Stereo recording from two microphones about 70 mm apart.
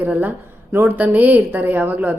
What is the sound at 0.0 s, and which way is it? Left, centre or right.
A woman's voice, right.